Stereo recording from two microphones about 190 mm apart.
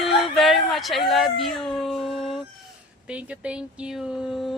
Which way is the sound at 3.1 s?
5° right (ahead or behind).